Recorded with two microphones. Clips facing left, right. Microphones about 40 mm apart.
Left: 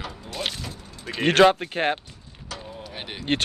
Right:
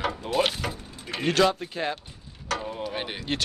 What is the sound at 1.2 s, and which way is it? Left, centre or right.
Speech, left.